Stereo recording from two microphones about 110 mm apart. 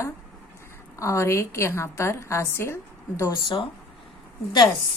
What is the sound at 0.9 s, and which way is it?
A woman's voice, 25° left (ahead or behind).